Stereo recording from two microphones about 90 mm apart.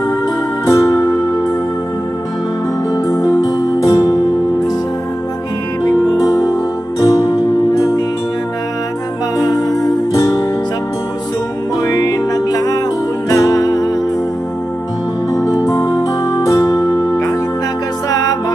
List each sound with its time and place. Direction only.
0.7 s music: 35° left (ahead or behind)
2.9 s music: 40° left (ahead or behind)
6.2 s music: 40° left (ahead or behind)
9.4 s music: 40° left (ahead or behind)
11.8 s music: 40° left (ahead or behind)
15.7 s music: 35° left (ahead or behind)